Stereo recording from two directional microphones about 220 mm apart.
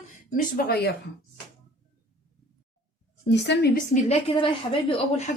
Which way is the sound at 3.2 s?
50° left (ahead or behind).